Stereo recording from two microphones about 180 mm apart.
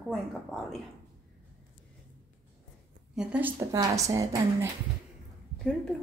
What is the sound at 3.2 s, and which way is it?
A woman's voice, 5° right (ahead or behind).